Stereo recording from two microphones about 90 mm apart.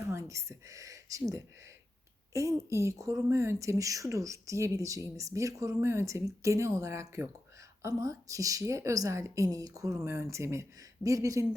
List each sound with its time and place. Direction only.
0.1 s speech: 35° right (ahead or behind)
2.3 s a woman's voice: 35° right (ahead or behind)